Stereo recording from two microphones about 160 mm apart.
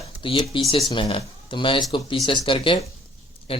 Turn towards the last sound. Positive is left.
turn(degrees=35)  # may be behind; listen again after turning